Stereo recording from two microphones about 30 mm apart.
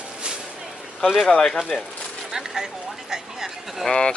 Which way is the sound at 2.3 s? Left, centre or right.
Centre.